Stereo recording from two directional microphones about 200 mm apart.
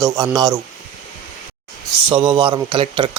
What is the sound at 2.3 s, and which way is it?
Speech, 25° right (ahead or behind).